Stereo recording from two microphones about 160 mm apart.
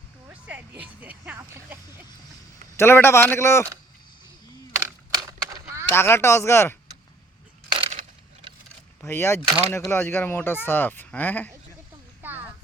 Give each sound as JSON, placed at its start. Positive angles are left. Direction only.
{"t": 0.8, "sound": "speech", "side_deg": -10}
{"t": 2.7, "sound": "speech", "side_deg": 15}
{"t": 4.8, "sound": "a sound", "side_deg": -25}
{"t": 5.9, "sound": "speech", "side_deg": 15}
{"t": 7.7, "sound": "coin", "side_deg": -35}
{"t": 9.0, "sound": "speech", "side_deg": 15}
{"t": 12.2, "sound": "a sound", "side_deg": -10}